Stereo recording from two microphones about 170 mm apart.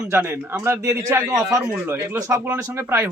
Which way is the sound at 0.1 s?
10° right (ahead or behind).